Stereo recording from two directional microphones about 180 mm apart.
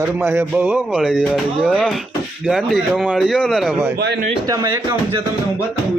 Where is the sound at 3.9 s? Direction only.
70° right (ahead or behind).